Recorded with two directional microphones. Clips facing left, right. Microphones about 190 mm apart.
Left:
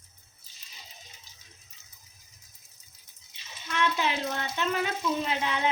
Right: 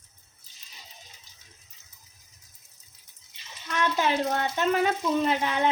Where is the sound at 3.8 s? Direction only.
45° right (ahead or behind).